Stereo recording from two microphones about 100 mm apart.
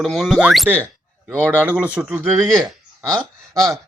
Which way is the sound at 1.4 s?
15° right (ahead or behind).